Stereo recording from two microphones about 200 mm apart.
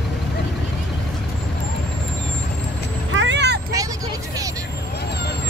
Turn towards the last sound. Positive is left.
turn(degrees=-60)  # may be behind; listen again after turning